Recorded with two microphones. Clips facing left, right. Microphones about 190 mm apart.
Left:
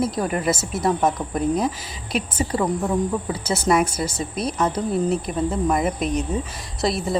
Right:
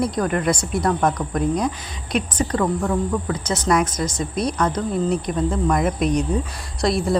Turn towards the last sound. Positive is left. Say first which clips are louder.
# right 3 dB
turn(degrees=0)  # may be behind; listen again after turning